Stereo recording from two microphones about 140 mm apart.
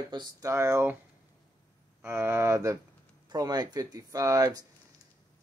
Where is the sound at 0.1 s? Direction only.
25° right (ahead or behind).